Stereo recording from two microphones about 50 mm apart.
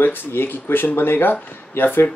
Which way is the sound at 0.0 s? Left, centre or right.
Left.